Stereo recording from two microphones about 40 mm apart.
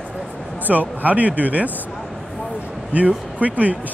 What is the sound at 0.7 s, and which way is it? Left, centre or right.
Speech, right.